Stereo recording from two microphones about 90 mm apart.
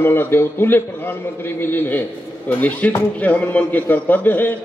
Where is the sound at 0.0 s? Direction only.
25° left (ahead or behind).